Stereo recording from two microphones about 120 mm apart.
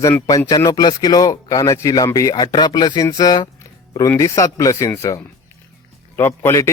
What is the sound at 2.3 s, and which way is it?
Speech, 35° left (ahead or behind).